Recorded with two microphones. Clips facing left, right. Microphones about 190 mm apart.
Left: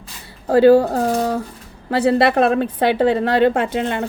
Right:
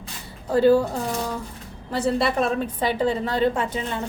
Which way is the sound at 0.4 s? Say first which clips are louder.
Left 6 dB; 80° left.